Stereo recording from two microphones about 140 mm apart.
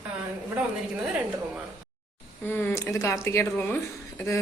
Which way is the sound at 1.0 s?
10° right (ahead or behind).